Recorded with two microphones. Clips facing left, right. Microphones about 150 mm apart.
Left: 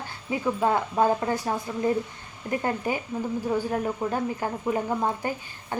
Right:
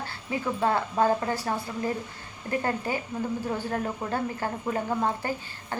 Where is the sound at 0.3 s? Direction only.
15° left (ahead or behind).